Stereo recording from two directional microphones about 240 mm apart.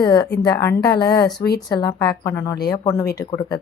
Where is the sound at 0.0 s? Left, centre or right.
Centre.